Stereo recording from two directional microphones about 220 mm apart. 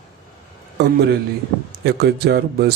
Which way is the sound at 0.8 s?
50° right (ahead or behind).